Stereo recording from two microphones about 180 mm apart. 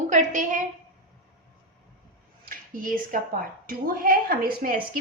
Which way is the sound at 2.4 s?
50° right (ahead or behind).